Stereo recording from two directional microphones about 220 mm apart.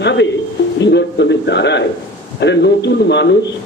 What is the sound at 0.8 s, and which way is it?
Speech, 50° left (ahead or behind).